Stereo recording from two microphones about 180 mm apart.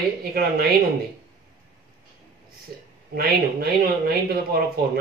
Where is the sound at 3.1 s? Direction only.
60° right (ahead or behind).